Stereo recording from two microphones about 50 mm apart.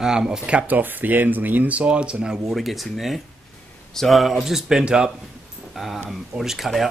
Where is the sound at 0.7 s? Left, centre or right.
Right.